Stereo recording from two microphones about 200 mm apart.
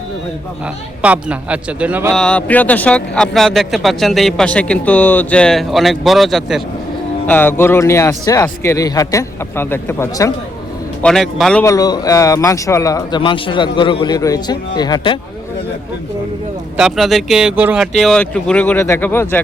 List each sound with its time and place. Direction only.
1.0 s speech: 5° right (ahead or behind)
2.1 s speech: 5° left (ahead or behind)
7.3 s a man's voice: 10° left (ahead or behind)
11.0 s speech: centre (ahead or behind)
11.6 s speech: 15° left (ahead or behind)
16.7 s a man's voice: centre (ahead or behind)